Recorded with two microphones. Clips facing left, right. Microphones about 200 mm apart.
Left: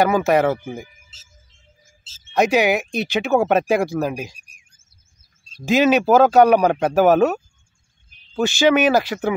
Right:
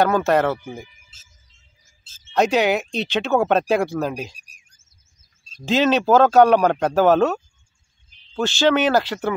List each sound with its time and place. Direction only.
0.0 s speech: 10° left (ahead or behind)
2.3 s speech: 10° left (ahead or behind)
4.4 s a sound: 40° right (ahead or behind)
5.7 s speech: 10° left (ahead or behind)